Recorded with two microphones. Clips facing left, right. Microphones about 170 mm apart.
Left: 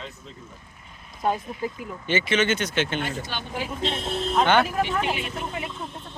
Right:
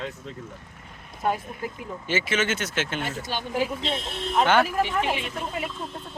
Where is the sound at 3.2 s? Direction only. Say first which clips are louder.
Right 5 dB; 40° right (ahead or behind).